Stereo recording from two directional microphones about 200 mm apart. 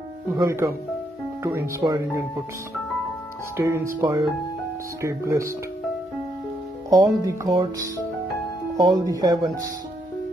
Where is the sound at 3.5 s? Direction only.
15° right (ahead or behind).